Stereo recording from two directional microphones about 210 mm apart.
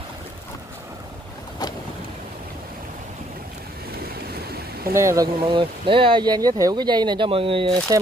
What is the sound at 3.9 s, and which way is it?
Boat, 45° right (ahead or behind).